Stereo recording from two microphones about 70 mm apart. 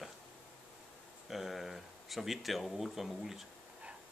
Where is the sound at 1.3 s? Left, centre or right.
Centre.